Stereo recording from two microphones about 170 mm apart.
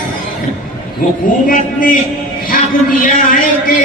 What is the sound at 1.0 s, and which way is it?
Speech, 55° left (ahead or behind).